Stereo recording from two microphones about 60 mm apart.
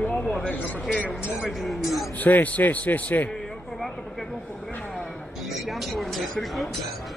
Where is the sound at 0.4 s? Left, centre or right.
Left.